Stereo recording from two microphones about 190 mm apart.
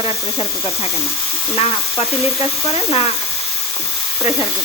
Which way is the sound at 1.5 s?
30° left (ahead or behind).